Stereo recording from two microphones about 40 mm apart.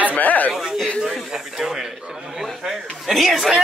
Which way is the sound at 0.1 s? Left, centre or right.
Left.